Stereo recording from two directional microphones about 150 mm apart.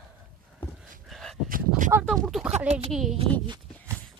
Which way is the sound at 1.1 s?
Centre (ahead or behind).